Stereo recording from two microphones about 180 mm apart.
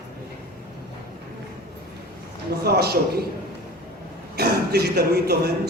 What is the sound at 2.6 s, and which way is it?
Speech, 60° right (ahead or behind).